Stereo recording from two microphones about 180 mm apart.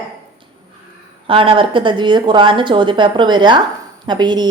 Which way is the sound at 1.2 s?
30° right (ahead or behind).